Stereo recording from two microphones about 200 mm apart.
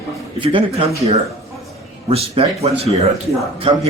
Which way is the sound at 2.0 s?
30° right (ahead or behind).